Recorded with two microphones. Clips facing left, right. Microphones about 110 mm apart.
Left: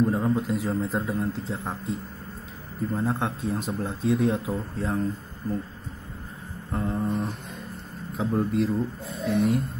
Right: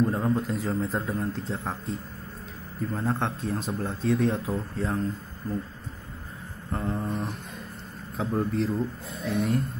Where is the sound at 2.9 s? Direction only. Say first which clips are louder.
Left 1 dB; 5° left (ahead or behind).